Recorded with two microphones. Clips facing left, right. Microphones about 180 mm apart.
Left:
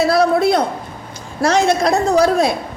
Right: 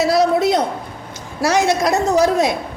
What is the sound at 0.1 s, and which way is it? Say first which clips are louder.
Speech: left 1 dB; 20° right (ahead or behind).